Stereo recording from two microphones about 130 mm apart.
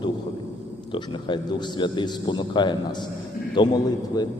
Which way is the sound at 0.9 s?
35° left (ahead or behind).